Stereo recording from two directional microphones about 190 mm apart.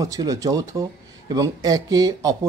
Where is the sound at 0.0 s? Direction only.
20° right (ahead or behind).